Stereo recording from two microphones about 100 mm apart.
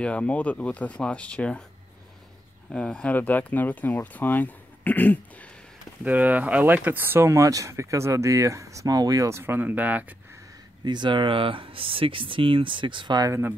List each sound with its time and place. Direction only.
0.0 s speech: 10° left (ahead or behind)
2.7 s speech: 10° left (ahead or behind)
6.0 s speech: 15° right (ahead or behind); by 9.4 s 35° right (ahead or behind)
9.4 s speech: 20° right (ahead or behind)
10.8 s speech: 45° right (ahead or behind)
13.3 s speech: 20° right (ahead or behind)